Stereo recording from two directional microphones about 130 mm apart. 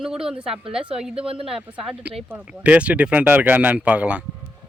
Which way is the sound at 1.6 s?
10° right (ahead or behind).